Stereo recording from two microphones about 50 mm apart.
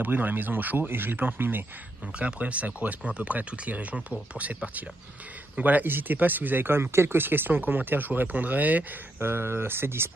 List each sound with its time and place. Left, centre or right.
0.0 s speech: right
2.1 s speech: right
5.6 s speech: right
9.2 s speech: right